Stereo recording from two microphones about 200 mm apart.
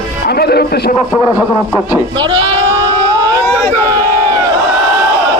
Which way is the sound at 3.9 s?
15° right (ahead or behind).